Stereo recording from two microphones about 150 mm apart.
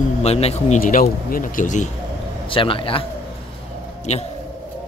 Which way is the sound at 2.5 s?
35° left (ahead or behind).